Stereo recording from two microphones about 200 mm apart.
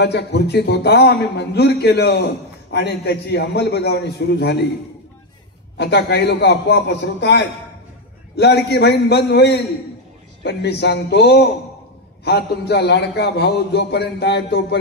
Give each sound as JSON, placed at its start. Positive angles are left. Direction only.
{"t": 0.0, "sound": "a man's voice", "side_deg": 55}
{"t": 5.8, "sound": "a man's voice", "side_deg": 55}